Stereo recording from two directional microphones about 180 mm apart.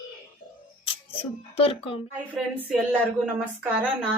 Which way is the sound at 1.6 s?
30° left (ahead or behind).